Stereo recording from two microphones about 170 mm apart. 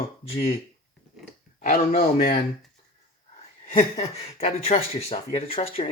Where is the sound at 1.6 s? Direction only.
45° left (ahead or behind).